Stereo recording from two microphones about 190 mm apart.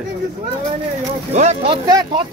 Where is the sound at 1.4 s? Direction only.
30° right (ahead or behind).